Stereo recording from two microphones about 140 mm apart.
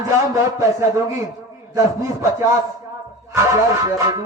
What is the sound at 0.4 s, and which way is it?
A man's voice, 20° right (ahead or behind).